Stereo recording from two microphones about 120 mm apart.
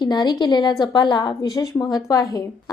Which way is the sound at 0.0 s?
35° left (ahead or behind).